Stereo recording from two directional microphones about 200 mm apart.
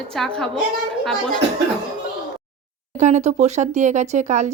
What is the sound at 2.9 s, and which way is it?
Speech, 35° right (ahead or behind).